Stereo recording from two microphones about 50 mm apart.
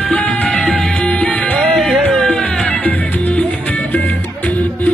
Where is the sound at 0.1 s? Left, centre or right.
Left.